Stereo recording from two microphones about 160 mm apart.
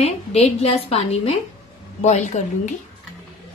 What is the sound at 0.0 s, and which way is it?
A woman's voice, 40° left (ahead or behind).